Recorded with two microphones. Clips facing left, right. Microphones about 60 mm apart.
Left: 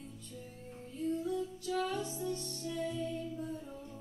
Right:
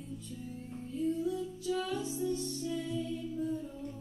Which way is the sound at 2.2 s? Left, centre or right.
Left.